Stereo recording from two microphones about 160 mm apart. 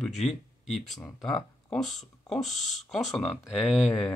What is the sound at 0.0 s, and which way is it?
Speech, centre (ahead or behind).